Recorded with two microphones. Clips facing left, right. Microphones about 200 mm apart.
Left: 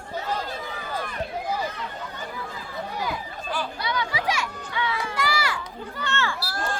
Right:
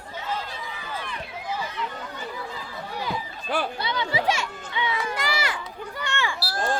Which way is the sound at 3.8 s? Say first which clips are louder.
Right 1 dB; 25° right (ahead or behind).